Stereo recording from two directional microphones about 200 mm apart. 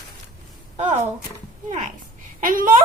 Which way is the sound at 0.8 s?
35° right (ahead or behind).